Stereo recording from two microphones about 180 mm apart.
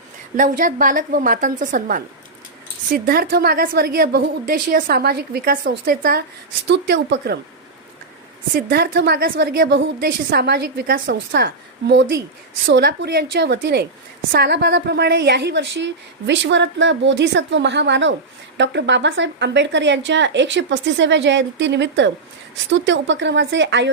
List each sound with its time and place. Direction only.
0.3 s a woman's voice: 45° right (ahead or behind)
6.7 s a woman's voice: 75° right (ahead or behind)
8.5 s a woman's voice: 55° right (ahead or behind); by 23.9 s 80° right